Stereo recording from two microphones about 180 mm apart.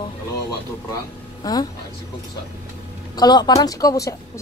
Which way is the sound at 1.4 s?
20° left (ahead or behind).